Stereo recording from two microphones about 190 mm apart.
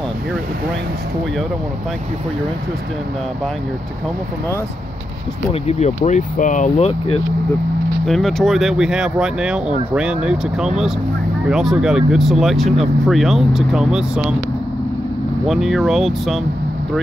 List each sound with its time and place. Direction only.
5.5 s speech: 35° left (ahead or behind)
8.0 s speech: centre (ahead or behind)
15.4 s speech: centre (ahead or behind)